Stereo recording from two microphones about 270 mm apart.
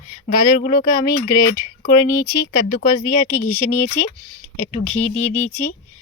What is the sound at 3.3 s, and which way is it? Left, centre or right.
Speech, centre.